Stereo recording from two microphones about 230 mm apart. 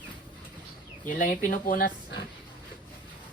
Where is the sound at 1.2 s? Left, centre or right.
Left.